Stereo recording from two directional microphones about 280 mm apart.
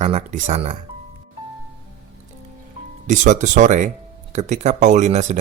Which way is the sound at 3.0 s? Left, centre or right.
Right.